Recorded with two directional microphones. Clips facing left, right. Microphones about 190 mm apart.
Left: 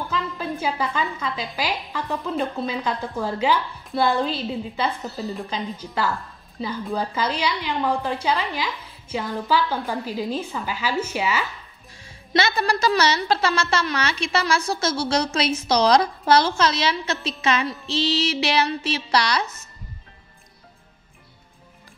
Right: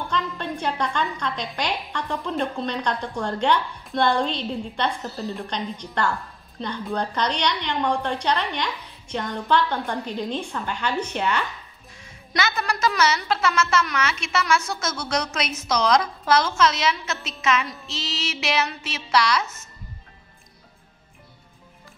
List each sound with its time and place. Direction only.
0.1 s a woman's voice: 5° left (ahead or behind)
12.0 s a woman's voice: 30° left (ahead or behind)